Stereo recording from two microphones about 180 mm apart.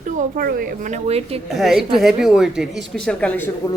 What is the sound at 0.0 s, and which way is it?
A woman's voice, 50° right (ahead or behind).